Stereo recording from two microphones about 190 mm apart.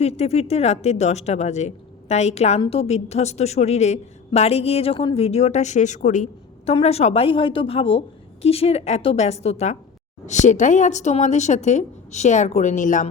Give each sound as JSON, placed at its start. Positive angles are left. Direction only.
{"t": 0.0, "sound": "a woman's voice", "side_deg": 35}